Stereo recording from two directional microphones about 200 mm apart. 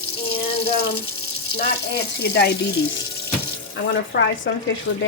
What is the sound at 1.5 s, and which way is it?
Speech, 55° left (ahead or behind).